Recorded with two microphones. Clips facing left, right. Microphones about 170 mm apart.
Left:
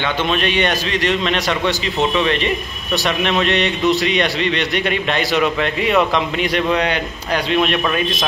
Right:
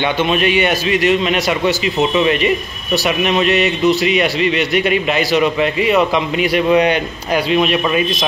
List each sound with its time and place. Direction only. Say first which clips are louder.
0.0 s a man's voice: right 4 dB; 10° right (ahead or behind)